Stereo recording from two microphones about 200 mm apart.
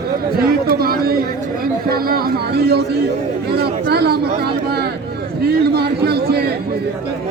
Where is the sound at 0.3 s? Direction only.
50° right (ahead or behind).